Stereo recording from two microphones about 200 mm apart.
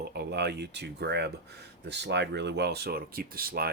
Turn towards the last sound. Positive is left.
turn(degrees=-50)  # may be behind; listen again after turning